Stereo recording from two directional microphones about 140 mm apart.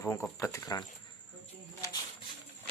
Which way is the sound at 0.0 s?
20° left (ahead or behind).